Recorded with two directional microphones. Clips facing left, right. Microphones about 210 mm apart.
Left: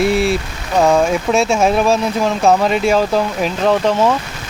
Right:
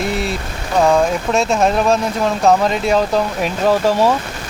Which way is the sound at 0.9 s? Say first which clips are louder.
Left 2 dB; centre (ahead or behind).